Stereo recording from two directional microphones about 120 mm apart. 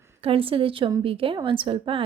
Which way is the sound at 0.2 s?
50° right (ahead or behind).